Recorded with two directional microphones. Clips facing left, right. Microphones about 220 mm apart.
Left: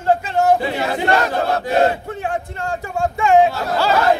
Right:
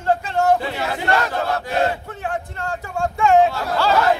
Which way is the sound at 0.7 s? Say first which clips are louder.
Left 3 dB; 15° left (ahead or behind).